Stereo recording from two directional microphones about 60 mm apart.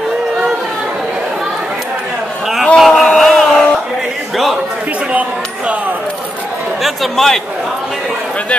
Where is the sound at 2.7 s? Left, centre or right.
Centre.